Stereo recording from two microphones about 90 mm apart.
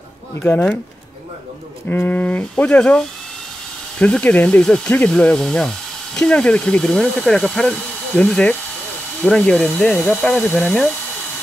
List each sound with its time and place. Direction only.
0.4 s speech: 15° left (ahead or behind)
1.9 s speech: 20° left (ahead or behind); by 10.9 s 5° left (ahead or behind)